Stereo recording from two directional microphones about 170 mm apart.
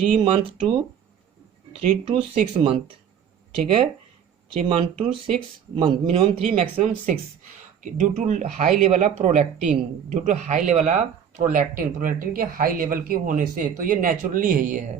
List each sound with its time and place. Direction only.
0.2 s speech: 30° right (ahead or behind)
2.0 s speech: 30° right (ahead or behind)
4.7 s speech: 30° right (ahead or behind)
6.7 s speech: 40° right (ahead or behind)